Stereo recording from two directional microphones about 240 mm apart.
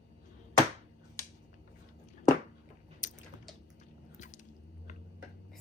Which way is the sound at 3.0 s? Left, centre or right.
Left.